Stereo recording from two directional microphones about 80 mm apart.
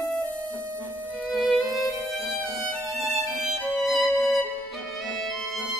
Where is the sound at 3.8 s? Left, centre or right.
Left.